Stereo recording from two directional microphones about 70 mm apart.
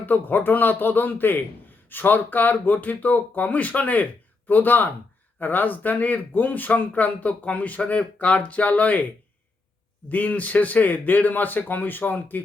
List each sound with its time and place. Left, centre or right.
0.0 s speech: left
10.1 s speech: left